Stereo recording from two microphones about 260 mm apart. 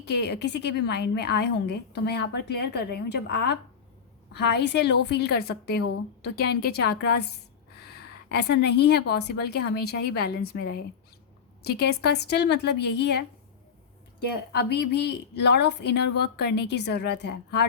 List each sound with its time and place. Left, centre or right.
0.0 s a woman's voice: left
8.3 s a woman's voice: left